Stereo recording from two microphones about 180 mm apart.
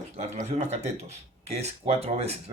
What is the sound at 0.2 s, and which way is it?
Speech, 40° right (ahead or behind).